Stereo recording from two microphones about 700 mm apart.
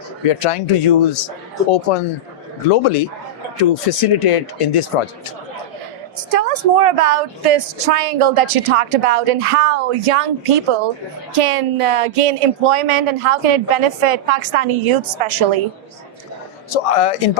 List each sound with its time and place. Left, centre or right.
0.3 s speech: left
6.3 s speech: right
16.6 s speech: left